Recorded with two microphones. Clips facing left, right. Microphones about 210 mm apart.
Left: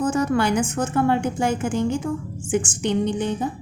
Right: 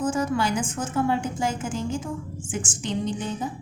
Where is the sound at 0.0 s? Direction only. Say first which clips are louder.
Left 4 dB; 65° left (ahead or behind).